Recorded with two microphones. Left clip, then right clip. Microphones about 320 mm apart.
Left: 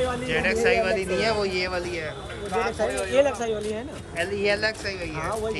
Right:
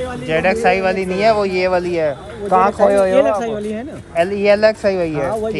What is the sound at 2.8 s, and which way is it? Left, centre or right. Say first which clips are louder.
Speech: right 10 dB; right.